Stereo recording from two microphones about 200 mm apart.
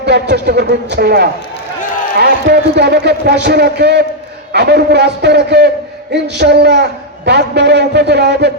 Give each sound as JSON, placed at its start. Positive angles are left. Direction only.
{"t": 0.0, "sound": "a man's voice", "side_deg": -55}